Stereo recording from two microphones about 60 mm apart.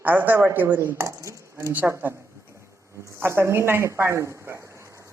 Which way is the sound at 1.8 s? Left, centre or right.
Right.